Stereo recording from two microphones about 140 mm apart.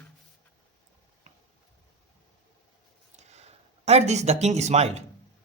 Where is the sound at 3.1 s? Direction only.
50° right (ahead or behind).